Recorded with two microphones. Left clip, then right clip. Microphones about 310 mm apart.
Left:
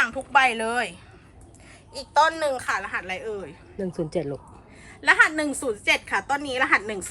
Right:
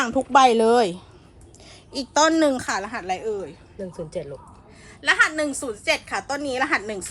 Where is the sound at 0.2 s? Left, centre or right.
Left.